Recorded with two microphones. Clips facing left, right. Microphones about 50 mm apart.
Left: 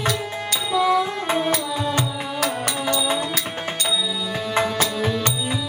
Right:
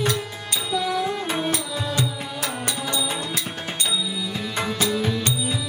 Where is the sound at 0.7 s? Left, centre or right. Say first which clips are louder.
Left 6 dB; left.